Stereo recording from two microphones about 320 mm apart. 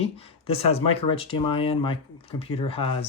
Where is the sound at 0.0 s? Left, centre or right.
Centre.